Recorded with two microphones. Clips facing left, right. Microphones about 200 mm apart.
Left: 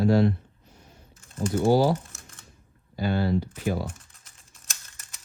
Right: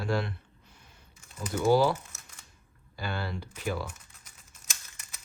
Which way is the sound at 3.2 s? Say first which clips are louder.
Left 9 dB; 45° left (ahead or behind).